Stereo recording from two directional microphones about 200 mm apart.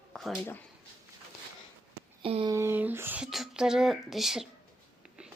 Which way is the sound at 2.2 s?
25° right (ahead or behind).